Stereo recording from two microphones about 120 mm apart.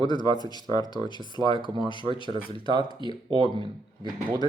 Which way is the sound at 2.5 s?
40° right (ahead or behind).